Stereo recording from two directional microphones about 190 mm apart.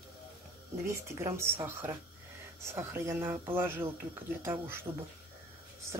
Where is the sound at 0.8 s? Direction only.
15° right (ahead or behind).